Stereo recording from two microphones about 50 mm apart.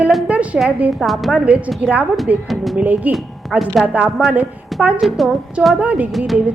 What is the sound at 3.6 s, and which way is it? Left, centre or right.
Speech, centre.